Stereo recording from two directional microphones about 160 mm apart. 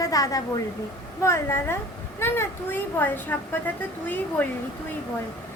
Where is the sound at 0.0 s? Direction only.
20° left (ahead or behind).